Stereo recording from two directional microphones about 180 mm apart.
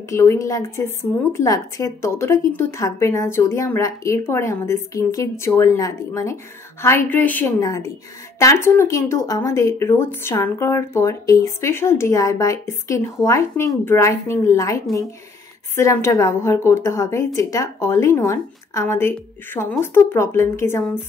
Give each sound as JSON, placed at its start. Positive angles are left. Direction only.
{"t": 0.1, "sound": "speech", "side_deg": 15}